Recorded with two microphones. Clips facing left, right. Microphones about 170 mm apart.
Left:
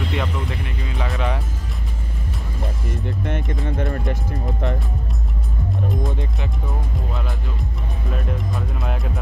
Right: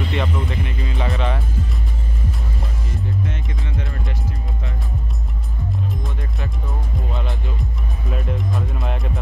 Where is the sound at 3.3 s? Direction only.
50° left (ahead or behind).